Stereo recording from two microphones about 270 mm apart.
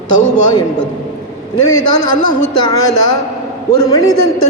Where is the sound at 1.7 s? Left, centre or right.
Left.